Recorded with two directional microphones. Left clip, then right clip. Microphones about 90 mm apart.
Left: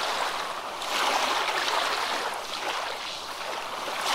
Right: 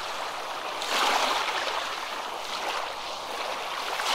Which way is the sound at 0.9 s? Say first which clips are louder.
Right 1 dB; 10° right (ahead or behind).